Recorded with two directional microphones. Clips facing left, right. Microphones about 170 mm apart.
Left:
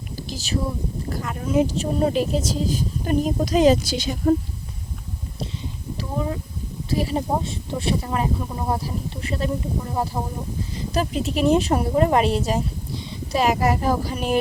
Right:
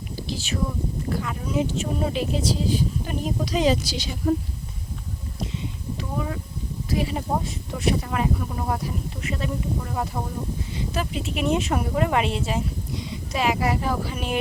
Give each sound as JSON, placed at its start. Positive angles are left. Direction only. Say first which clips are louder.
{"t": 0.2, "sound": "a woman's voice", "louder": "left 1 dB", "side_deg": 45}
{"t": 6.0, "sound": "a sound", "louder": "left 3 dB", "side_deg": 25}
{"t": 6.9, "sound": "a woman's voice", "louder": "left 3 dB", "side_deg": 35}
{"t": 10.8, "sound": "a woman's voice", "louder": "left 5 dB", "side_deg": 40}